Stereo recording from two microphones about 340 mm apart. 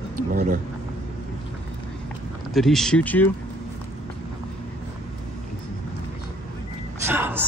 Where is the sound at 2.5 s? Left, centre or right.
Centre.